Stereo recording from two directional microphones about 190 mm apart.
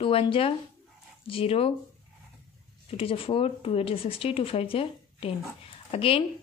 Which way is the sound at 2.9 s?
30° left (ahead or behind).